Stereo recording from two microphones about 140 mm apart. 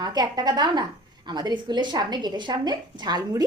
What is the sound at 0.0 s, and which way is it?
A woman's voice, 30° right (ahead or behind).